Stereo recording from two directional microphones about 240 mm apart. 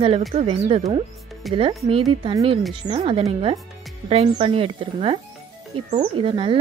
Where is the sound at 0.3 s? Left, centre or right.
Right.